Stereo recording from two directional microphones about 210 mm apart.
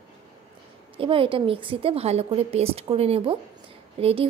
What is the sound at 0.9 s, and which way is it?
A woman's voice, 25° right (ahead or behind).